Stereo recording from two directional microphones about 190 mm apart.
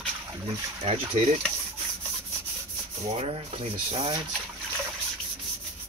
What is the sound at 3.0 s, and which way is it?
Speech, 30° right (ahead or behind).